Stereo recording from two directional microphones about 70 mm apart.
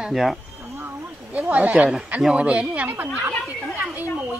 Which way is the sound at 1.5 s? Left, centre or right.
Centre.